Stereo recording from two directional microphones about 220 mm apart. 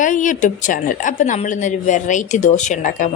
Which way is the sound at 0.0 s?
35° left (ahead or behind).